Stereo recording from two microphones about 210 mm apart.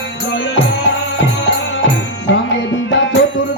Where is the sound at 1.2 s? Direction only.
60° left (ahead or behind).